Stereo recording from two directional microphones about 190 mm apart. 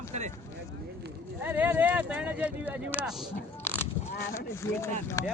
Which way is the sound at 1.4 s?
10° right (ahead or behind).